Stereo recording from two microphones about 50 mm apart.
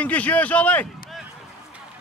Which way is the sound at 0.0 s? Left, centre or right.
Left.